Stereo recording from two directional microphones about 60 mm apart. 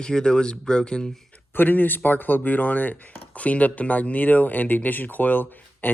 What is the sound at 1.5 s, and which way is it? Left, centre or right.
Chopping, left.